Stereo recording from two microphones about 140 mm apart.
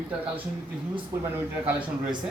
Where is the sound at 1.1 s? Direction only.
20° right (ahead or behind).